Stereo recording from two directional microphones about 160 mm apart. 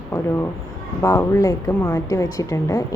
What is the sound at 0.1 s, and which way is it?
A woman's voice, 15° left (ahead or behind).